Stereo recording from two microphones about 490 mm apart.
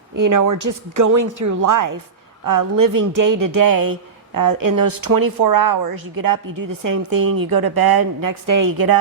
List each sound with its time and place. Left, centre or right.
0.2 s a woman's voice: right